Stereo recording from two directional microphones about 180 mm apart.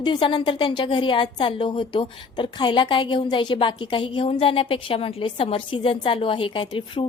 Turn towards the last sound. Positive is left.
turn(degrees=30)  # may be behind; listen again after turning